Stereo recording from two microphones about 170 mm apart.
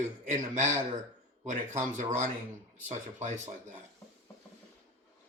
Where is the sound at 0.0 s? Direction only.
45° right (ahead or behind).